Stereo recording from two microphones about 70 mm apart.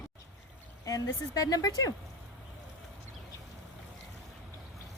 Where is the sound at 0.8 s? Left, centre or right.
Left.